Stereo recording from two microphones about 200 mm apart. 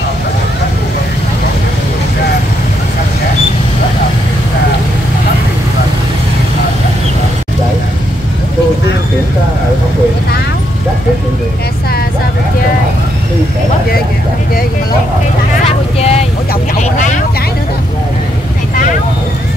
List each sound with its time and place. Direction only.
16.0 s vehicle: 30° left (ahead or behind)